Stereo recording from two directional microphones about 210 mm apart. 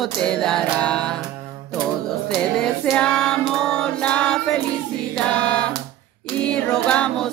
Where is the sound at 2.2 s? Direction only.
Centre (ahead or behind).